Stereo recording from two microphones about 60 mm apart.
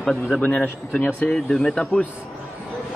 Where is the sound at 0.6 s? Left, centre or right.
Left.